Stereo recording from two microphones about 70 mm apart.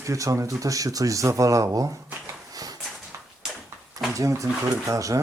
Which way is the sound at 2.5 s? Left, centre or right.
Right.